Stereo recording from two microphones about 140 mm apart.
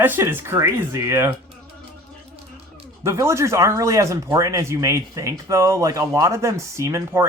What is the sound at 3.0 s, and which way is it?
Speech, 20° right (ahead or behind).